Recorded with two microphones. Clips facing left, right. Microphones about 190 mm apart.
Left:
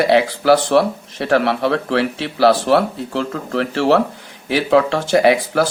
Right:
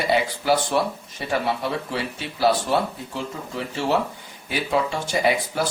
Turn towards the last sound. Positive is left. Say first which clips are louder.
# left 8 dB
turn(degrees=85)